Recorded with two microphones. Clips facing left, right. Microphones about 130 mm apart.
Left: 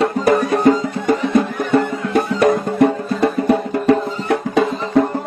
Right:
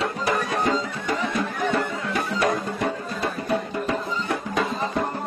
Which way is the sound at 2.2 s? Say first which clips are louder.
Left 10 dB; 55° left (ahead or behind).